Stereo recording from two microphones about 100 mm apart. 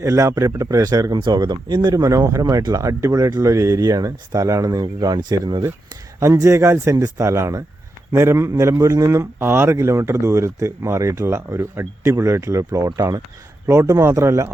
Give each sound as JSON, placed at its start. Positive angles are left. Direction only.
{"t": 0.0, "sound": "a man's voice", "side_deg": -30}